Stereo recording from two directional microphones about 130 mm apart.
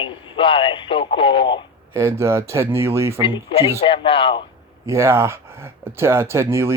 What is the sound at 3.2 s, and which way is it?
Speech, 40° left (ahead or behind).